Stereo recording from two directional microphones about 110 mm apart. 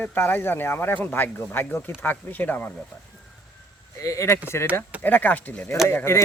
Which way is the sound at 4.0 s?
25° left (ahead or behind).